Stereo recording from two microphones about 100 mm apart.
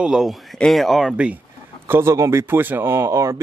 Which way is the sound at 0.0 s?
5° right (ahead or behind).